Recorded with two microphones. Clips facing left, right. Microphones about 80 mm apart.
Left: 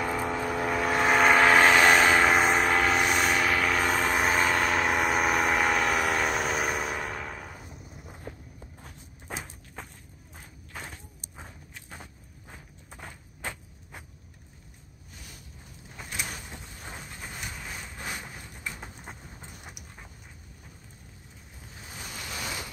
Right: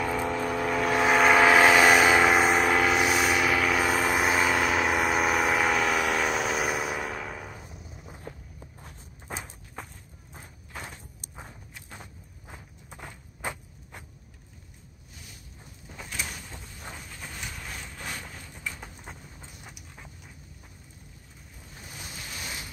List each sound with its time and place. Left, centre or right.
0.0 s vehicle: centre
8.7 s walk: centre
13.4 s walk: centre
16.0 s a sound: centre